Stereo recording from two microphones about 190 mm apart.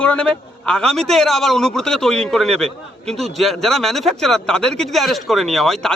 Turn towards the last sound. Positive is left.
turn(degrees=0)  # may be behind; listen again after turning